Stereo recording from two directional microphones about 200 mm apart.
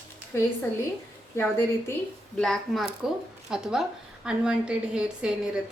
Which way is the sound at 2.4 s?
Centre (ahead or behind).